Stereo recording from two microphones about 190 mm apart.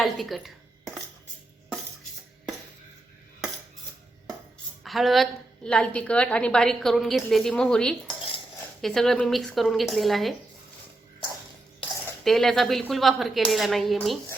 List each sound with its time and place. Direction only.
0.0 s dishes: centre (ahead or behind)
4.8 s a woman's voice: centre (ahead or behind)
12.2 s a woman's voice: centre (ahead or behind)